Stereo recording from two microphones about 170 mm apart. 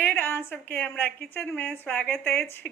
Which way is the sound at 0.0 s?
10° left (ahead or behind).